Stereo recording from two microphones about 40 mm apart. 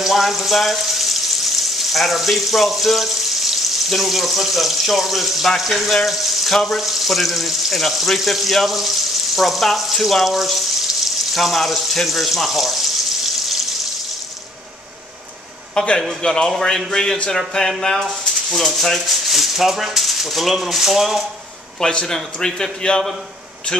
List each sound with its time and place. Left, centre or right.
0.0 s frying: centre
6.6 s speech: centre
15.7 s a man's voice: left
16.2 s a man's voice: centre
21.7 s a man's voice: centre